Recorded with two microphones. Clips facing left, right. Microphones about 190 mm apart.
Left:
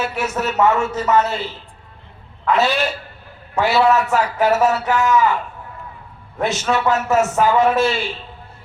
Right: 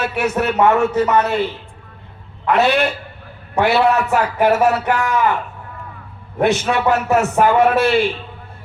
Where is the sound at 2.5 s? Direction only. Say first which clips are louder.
Right 3 dB; 60° right (ahead or behind).